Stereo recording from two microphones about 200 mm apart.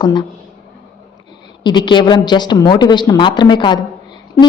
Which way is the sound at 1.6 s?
25° left (ahead or behind).